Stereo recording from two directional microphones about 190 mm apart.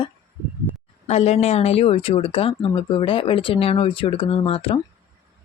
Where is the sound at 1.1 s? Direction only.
35° left (ahead or behind).